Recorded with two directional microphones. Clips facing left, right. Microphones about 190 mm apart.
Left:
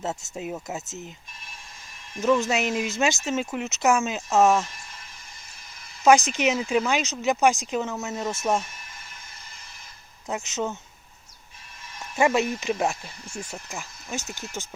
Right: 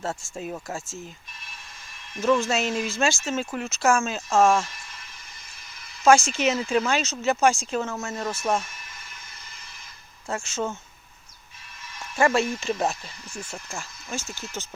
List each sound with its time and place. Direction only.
0.0 s speech: 20° left (ahead or behind)
2.2 s speech: 15° left (ahead or behind)
6.1 s speech: 15° left (ahead or behind)
10.2 s speech: 20° left (ahead or behind)
12.2 s speech: 15° left (ahead or behind)